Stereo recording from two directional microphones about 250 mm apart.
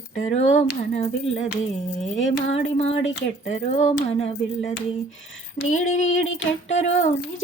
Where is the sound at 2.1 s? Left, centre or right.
Left.